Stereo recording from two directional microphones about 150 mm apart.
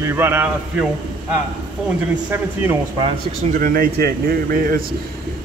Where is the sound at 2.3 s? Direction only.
15° right (ahead or behind).